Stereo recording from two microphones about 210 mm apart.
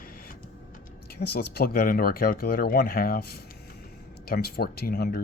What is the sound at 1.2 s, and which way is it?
Speech, 50° left (ahead or behind).